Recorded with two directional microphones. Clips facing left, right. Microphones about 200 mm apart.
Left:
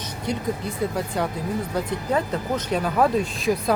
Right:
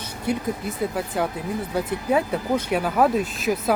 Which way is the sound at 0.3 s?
5° right (ahead or behind).